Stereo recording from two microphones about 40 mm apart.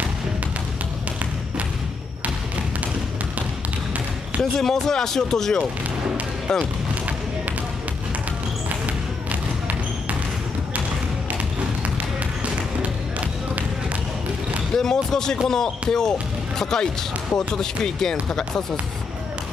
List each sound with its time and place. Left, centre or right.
4.4 s speech: centre
14.8 s speech: centre